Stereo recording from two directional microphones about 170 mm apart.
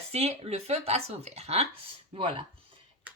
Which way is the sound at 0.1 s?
40° right (ahead or behind).